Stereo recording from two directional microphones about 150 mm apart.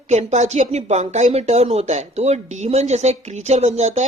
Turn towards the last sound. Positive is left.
turn(degrees=-50)  # may be behind; listen again after turning